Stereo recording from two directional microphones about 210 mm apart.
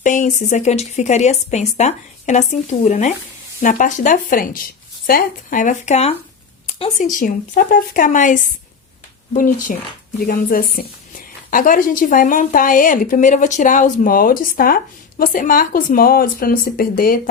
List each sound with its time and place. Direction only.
0.0 s a woman's voice: 35° left (ahead or behind)